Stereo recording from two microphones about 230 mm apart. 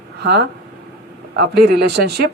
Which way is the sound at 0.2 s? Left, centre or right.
Right.